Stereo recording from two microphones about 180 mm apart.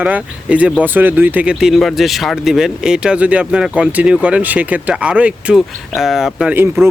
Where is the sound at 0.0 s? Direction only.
10° right (ahead or behind).